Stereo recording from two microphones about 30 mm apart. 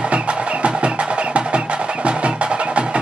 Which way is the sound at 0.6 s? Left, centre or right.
Right.